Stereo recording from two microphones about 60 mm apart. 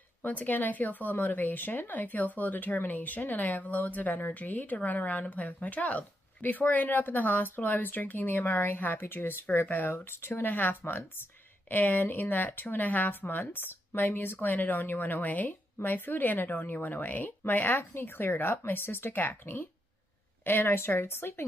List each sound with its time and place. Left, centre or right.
0.2 s speech: left
9.9 s speech: left